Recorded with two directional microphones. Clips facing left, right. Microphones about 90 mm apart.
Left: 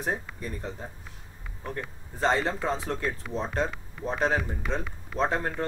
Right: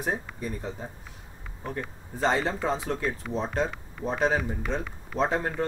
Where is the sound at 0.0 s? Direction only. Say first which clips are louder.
Right 1 dB; 5° right (ahead or behind).